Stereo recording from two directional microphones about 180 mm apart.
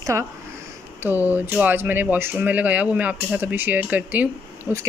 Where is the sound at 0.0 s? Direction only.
15° right (ahead or behind).